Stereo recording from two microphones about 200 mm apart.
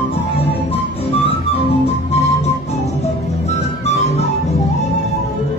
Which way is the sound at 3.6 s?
30° left (ahead or behind).